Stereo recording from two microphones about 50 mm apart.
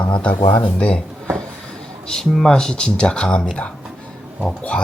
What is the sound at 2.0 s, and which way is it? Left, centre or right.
Speech, centre.